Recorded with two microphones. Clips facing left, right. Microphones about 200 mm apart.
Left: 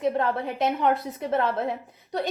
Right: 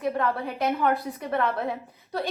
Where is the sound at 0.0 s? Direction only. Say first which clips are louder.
Left 2 dB; 25° left (ahead or behind).